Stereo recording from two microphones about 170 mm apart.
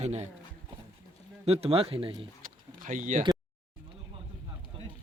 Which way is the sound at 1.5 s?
35° right (ahead or behind).